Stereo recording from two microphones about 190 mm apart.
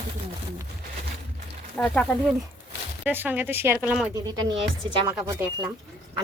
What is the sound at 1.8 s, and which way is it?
Speech, 5° left (ahead or behind).